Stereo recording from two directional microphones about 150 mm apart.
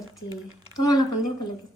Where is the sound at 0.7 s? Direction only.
25° left (ahead or behind).